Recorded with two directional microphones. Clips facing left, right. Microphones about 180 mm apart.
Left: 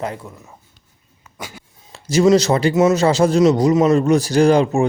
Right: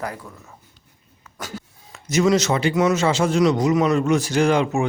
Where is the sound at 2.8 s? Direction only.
25° left (ahead or behind).